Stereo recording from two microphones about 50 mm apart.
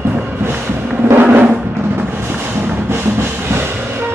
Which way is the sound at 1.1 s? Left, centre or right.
Right.